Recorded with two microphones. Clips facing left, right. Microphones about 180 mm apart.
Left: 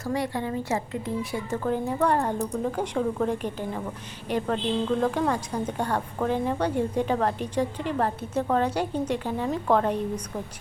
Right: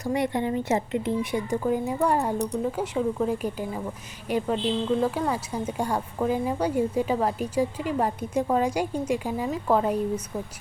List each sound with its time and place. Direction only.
0.0 s a woman's voice: 20° right (ahead or behind)